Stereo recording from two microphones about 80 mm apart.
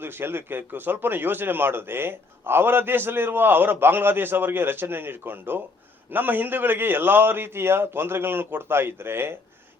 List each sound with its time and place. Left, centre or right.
0.0 s speech: right